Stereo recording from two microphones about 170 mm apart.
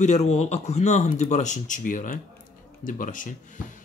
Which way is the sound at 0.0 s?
40° left (ahead or behind).